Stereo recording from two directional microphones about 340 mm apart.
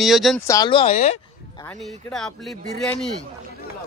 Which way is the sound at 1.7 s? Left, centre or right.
Centre.